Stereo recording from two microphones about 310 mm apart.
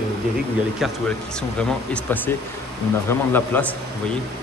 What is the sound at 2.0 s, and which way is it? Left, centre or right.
Speech, centre.